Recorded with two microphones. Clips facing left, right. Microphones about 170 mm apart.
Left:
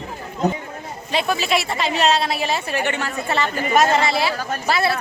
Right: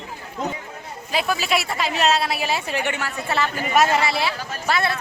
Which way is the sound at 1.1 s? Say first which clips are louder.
Left 2 dB; centre (ahead or behind).